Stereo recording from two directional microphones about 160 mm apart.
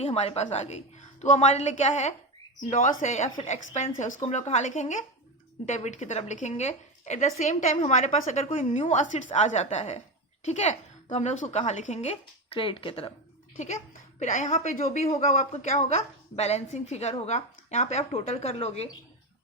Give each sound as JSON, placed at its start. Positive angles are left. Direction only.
{"t": 0.0, "sound": "a woman's voice", "side_deg": 40}
{"t": 14.2, "sound": "a woman's voice", "side_deg": 50}